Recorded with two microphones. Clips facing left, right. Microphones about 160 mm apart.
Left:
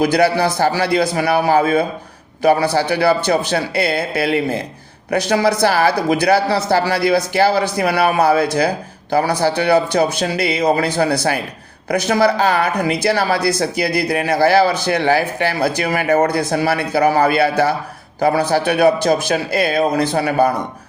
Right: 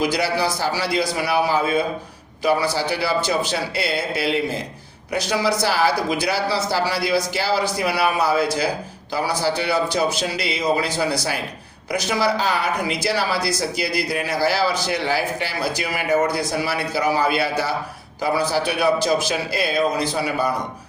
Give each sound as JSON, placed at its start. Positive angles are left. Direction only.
{"t": 0.0, "sound": "speech", "side_deg": 55}